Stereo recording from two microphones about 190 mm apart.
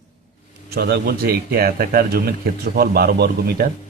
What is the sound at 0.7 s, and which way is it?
A man's voice, 55° right (ahead or behind).